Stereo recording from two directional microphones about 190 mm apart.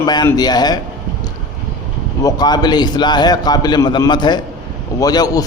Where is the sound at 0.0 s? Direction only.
20° left (ahead or behind).